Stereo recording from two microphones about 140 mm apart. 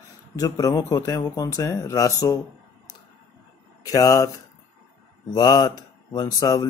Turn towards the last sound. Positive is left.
turn(degrees=30)  # may be behind; listen again after turning